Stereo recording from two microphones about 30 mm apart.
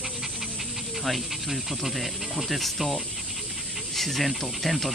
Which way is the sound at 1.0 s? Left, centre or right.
Centre.